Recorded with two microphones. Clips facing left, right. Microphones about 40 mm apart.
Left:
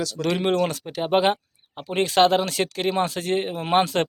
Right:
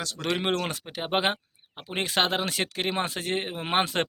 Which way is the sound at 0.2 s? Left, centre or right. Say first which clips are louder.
Left 5 dB; centre.